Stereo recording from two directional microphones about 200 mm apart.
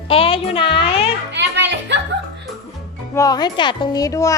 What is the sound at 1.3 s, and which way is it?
Music, 60° right (ahead or behind).